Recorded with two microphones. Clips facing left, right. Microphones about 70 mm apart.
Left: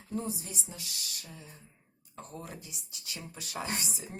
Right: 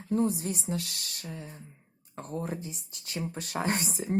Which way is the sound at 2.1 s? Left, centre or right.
Right.